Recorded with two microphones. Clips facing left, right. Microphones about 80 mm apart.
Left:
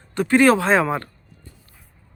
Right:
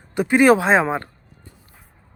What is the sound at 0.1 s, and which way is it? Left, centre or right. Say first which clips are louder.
Speech: right 1 dB; centre.